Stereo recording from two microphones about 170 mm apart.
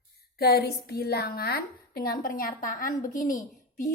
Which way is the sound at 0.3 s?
65° left (ahead or behind).